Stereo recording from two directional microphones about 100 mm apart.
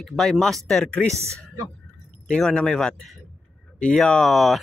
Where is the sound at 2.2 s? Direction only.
10° left (ahead or behind).